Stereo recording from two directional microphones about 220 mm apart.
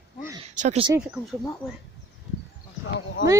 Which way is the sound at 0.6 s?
30° right (ahead or behind).